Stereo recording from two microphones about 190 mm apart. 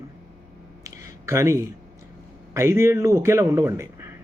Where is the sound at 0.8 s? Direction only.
15° right (ahead or behind).